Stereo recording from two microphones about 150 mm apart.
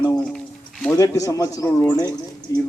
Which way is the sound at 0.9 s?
20° left (ahead or behind).